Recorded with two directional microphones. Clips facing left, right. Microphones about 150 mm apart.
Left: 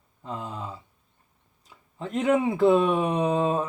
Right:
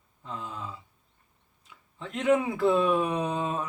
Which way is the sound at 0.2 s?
35° left (ahead or behind).